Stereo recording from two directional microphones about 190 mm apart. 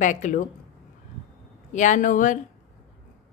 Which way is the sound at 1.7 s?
40° left (ahead or behind).